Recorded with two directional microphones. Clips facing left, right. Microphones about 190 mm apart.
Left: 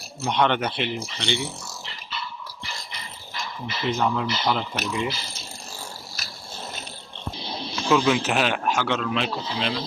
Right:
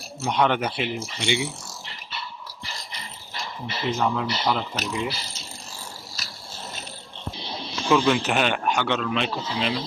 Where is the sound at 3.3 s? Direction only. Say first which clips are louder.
Even; 35° right (ahead or behind).